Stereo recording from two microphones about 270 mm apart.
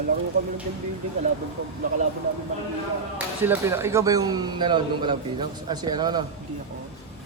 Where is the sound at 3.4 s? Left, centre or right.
Centre.